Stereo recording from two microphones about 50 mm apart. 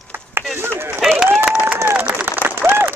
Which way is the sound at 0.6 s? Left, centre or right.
Right.